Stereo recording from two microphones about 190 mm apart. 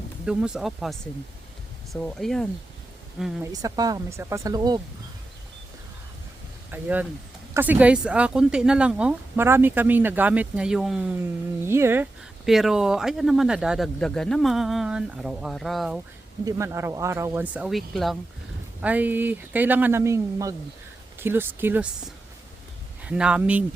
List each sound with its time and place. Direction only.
0.3 s speech: 5° right (ahead or behind)
3.4 s speech: 20° right (ahead or behind)
6.7 s speech: 10° right (ahead or behind)
12.5 s speech: centre (ahead or behind)
16.4 s speech: 15° right (ahead or behind)
23.0 s speech: 5° right (ahead or behind)